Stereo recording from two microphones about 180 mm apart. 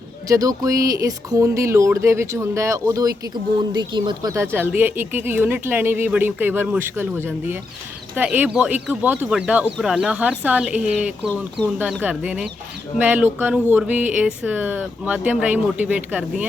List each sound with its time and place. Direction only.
0.3 s speech: 20° right (ahead or behind)
11.3 s speech: 5° left (ahead or behind)
12.0 s speech: 5° right (ahead or behind)